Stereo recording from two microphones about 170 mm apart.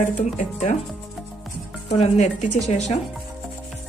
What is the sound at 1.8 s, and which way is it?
Speech, 40° left (ahead or behind).